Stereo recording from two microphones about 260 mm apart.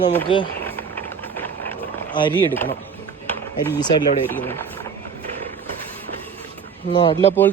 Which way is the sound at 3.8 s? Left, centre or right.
Centre.